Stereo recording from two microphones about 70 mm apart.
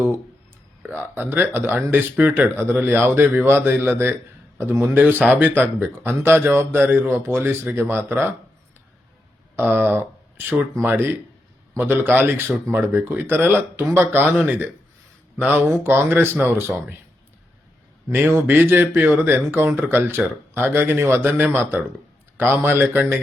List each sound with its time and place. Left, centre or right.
0.9 s a man's voice: right
4.8 s speech: right
9.6 s speech: right
18.1 s speech: right